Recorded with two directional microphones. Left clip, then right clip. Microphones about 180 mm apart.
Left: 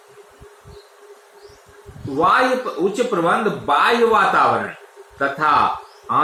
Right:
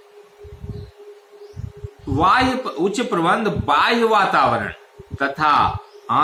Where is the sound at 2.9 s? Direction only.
45° right (ahead or behind).